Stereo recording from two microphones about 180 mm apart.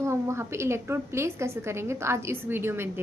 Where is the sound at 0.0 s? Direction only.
15° right (ahead or behind).